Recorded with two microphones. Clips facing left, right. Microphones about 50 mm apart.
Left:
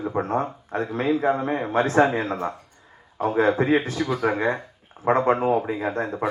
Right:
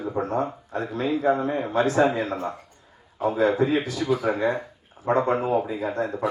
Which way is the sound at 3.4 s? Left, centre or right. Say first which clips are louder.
Left 2 dB; left.